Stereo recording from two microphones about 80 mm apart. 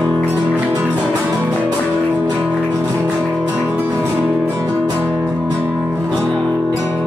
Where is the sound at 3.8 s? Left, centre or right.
Right.